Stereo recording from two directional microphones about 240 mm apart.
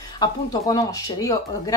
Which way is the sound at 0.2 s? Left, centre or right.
Centre.